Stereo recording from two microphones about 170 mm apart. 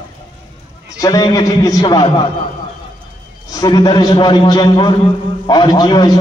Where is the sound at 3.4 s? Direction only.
25° left (ahead or behind).